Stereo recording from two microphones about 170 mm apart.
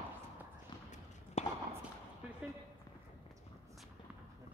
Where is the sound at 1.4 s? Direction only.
40° left (ahead or behind).